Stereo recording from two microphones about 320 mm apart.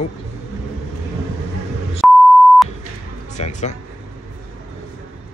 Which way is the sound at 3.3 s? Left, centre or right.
Left.